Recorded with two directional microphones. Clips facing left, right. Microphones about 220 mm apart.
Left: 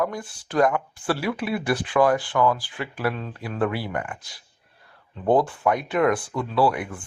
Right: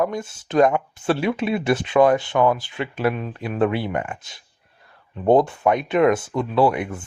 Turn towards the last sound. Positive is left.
turn(degrees=-25)  # may be behind; listen again after turning